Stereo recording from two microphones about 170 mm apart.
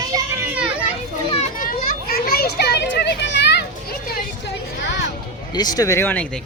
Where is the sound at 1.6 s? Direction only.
65° left (ahead or behind); by 3.6 s 85° left.